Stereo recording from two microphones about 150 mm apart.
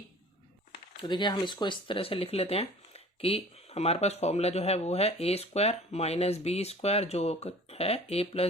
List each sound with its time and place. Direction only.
0.7 s speech: 30° left (ahead or behind)